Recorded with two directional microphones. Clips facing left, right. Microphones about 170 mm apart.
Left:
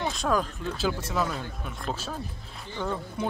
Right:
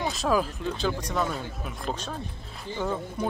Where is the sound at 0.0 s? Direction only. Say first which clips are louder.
Right 1 dB; centre (ahead or behind).